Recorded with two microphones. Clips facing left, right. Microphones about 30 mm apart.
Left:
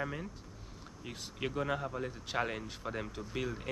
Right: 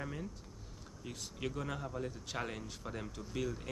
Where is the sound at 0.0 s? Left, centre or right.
Left.